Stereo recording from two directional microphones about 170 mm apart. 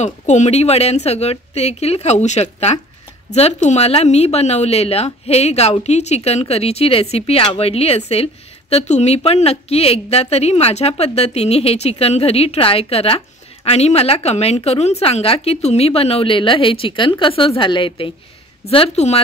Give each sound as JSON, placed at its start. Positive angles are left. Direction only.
{"t": 0.0, "sound": "speech", "side_deg": 45}